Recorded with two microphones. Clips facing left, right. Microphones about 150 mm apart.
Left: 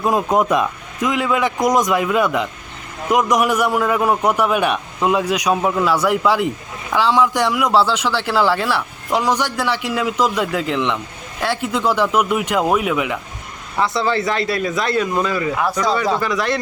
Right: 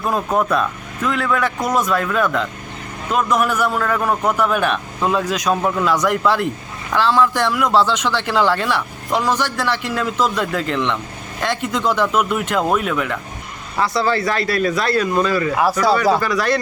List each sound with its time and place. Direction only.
0.0 s a man's voice: 15° left (ahead or behind)
13.8 s speech: 20° left (ahead or behind)